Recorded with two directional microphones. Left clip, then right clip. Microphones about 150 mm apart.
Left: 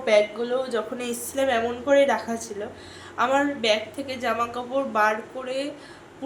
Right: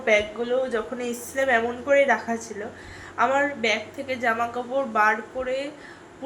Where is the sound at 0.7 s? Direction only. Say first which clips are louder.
Even; 10° left (ahead or behind).